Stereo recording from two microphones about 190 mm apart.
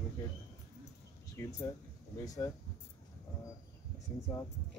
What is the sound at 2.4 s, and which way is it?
Speech, 15° left (ahead or behind).